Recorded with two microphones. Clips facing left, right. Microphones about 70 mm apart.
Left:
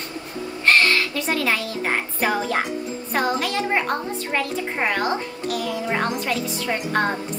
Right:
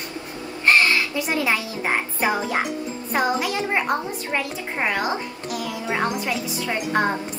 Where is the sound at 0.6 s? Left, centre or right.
Centre.